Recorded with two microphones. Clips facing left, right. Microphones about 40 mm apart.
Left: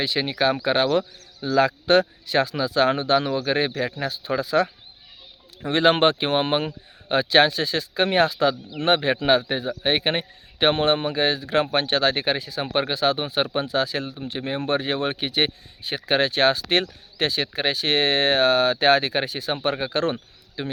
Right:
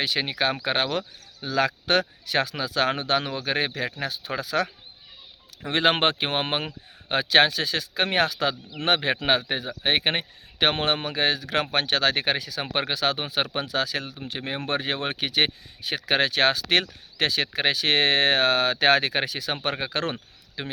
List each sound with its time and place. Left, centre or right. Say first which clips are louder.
0.0 s a man's voice: left 3 dB; right
12.6 s speech: left 5 dB; right
12.9 s speech: left 3 dB; right
14.3 s a man's voice: left 5 dB; right
15.2 s speech: left 1 dB; right
19.8 s speech: left 4 dB; right